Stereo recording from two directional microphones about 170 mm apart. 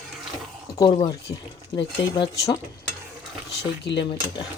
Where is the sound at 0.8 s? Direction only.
25° left (ahead or behind).